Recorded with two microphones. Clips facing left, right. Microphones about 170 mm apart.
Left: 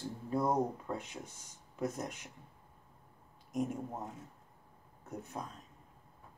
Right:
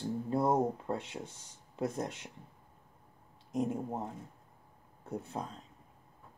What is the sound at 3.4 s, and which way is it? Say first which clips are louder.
Speech: right 3 dB; 30° right (ahead or behind).